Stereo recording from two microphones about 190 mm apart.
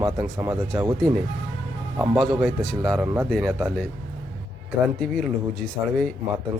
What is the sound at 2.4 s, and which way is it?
Speech, centre (ahead or behind).